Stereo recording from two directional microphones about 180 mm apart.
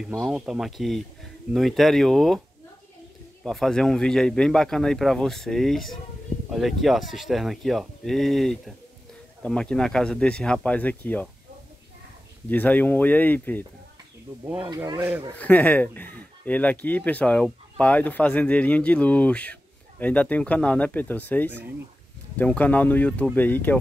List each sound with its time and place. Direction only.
0.0 s speech: centre (ahead or behind)
3.4 s speech: centre (ahead or behind)
12.4 s speech: 10° left (ahead or behind)
14.7 s speech: 20° right (ahead or behind)
15.3 s speech: 10° left (ahead or behind)